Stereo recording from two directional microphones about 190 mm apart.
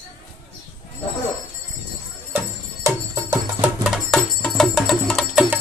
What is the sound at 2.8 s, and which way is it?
Music, 15° right (ahead or behind).